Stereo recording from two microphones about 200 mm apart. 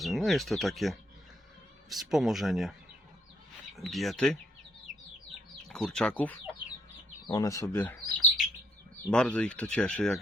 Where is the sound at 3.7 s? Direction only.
Centre (ahead or behind).